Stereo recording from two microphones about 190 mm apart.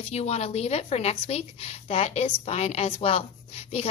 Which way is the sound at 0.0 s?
35° left (ahead or behind).